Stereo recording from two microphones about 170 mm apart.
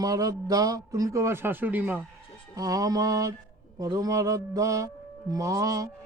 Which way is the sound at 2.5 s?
20° right (ahead or behind).